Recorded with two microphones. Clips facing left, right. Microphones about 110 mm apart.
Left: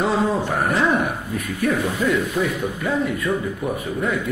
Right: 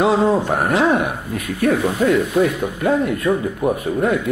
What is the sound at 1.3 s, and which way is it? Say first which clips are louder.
Speech: right 3 dB; 75° right (ahead or behind).